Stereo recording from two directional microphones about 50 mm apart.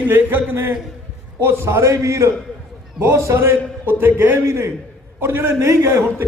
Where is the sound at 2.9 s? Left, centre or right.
Right.